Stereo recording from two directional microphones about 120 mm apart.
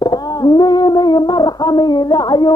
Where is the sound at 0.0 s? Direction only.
35° left (ahead or behind).